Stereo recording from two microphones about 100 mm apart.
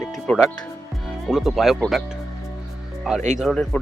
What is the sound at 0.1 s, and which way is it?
Speech, 5° left (ahead or behind).